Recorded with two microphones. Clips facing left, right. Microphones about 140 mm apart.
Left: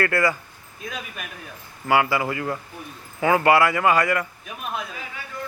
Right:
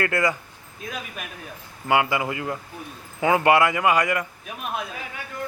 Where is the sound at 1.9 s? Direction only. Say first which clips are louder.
Left 1 dB; 20° right (ahead or behind).